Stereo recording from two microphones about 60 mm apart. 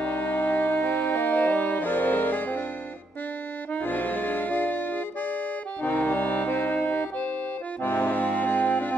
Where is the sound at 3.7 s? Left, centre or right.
Left.